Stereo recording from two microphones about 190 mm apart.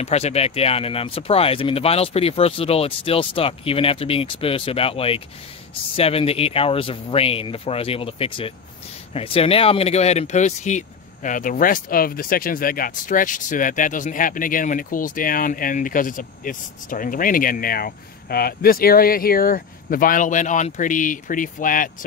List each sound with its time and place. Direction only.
0.0 s speech: 35° left (ahead or behind)